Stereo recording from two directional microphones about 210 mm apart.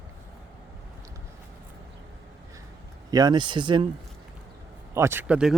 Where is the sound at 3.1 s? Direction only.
20° right (ahead or behind).